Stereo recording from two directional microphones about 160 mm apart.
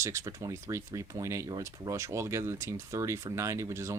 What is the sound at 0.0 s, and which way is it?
Speech, 20° right (ahead or behind).